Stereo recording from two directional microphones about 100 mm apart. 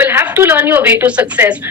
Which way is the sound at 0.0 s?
20° right (ahead or behind).